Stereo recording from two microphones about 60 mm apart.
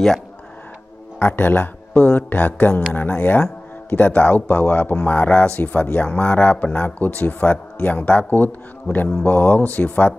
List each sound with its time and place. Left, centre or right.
1.2 s a man's voice: left